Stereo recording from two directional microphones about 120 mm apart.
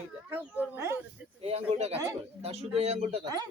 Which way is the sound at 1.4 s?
60° right (ahead or behind).